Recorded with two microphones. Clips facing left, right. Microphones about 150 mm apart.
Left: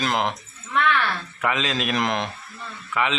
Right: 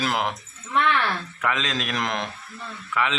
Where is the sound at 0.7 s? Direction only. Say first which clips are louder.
Even; 25° right (ahead or behind).